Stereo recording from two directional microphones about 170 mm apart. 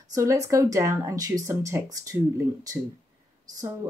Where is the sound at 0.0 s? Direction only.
20° right (ahead or behind).